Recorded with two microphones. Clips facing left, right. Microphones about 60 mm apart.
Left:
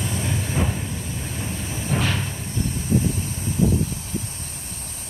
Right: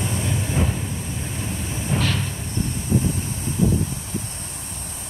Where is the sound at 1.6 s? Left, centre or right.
Centre.